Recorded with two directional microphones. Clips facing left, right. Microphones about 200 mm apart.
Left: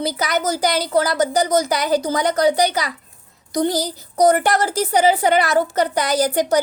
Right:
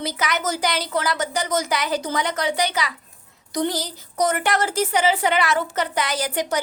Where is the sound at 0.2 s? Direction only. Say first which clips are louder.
Left 2 dB; 35° left (ahead or behind).